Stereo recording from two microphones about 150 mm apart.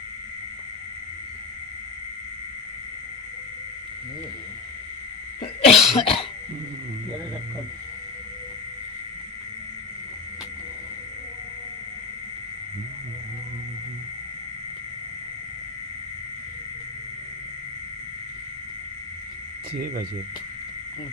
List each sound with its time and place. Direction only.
5.6 s cough: 45° left (ahead or behind)